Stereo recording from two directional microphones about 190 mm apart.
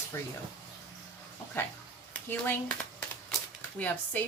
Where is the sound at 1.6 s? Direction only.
10° left (ahead or behind).